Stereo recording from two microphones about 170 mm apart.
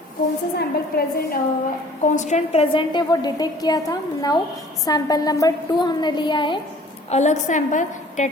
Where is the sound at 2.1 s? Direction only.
45° left (ahead or behind); by 6.6 s 25° left (ahead or behind).